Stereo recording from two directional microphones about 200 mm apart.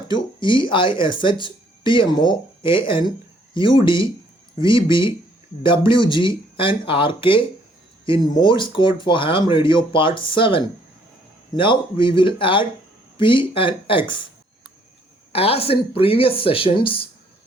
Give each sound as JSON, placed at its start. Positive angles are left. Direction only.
{"t": 0.1, "sound": "speech", "side_deg": 25}
{"t": 15.3, "sound": "speech", "side_deg": 30}